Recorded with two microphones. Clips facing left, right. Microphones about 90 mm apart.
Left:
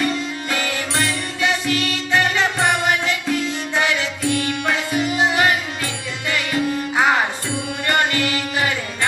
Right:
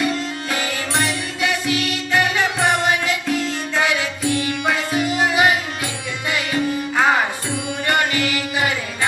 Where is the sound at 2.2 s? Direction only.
15° right (ahead or behind).